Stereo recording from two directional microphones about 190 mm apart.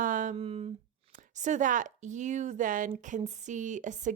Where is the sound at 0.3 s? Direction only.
30° right (ahead or behind).